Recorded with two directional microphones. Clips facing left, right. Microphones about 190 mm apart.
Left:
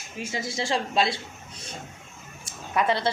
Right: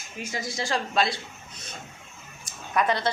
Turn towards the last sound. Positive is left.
turn(degrees=25)  # may be behind; listen again after turning